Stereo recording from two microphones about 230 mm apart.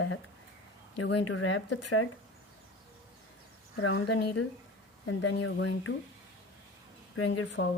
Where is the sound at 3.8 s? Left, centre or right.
Left.